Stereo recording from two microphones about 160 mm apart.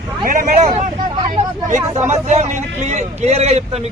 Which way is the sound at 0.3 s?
55° right (ahead or behind).